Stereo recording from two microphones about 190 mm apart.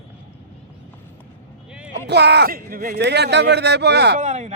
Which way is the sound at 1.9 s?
65° right (ahead or behind).